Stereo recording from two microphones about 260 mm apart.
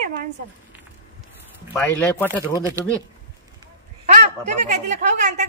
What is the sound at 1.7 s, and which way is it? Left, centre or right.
Speech, centre.